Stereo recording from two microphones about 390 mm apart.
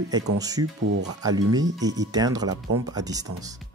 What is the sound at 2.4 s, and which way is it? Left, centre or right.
Speech, right.